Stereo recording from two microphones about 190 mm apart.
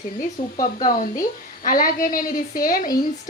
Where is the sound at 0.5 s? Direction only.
45° left (ahead or behind).